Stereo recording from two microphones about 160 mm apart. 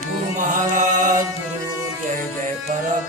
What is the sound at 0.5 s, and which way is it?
Chant, 55° right (ahead or behind).